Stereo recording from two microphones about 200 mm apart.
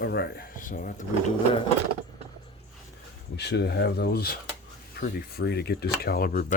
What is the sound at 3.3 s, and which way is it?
Speech, 55° left (ahead or behind).